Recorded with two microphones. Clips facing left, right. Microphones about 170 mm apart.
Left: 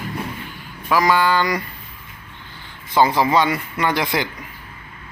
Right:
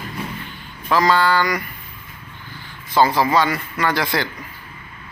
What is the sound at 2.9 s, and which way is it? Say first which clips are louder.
A man's voice: even; 20° left (ahead or behind).